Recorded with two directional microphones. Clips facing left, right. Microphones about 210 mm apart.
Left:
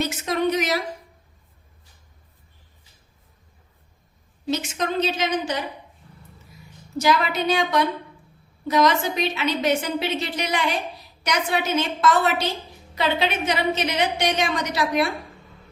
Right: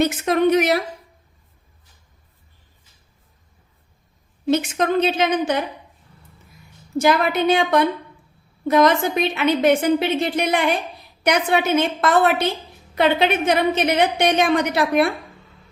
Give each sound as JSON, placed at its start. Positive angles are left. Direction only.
{"t": 0.0, "sound": "a sound", "side_deg": -60}
{"t": 4.5, "sound": "a woman's voice", "side_deg": -55}
{"t": 6.9, "sound": "a woman's voice", "side_deg": -55}